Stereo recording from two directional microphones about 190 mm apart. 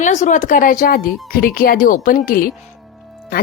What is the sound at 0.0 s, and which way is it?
Speech, 40° left (ahead or behind).